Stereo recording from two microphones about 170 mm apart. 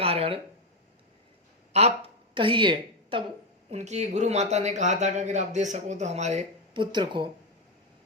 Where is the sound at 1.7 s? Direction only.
35° right (ahead or behind).